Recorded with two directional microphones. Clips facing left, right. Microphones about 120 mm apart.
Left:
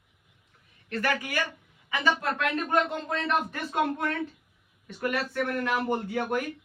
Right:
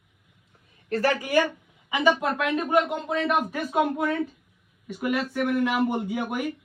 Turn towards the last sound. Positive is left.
turn(degrees=-10)  # may be behind; listen again after turning